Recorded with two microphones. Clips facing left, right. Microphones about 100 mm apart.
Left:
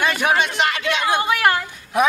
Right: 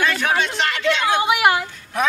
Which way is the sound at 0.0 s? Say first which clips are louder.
Left 1 dB; 15° left (ahead or behind).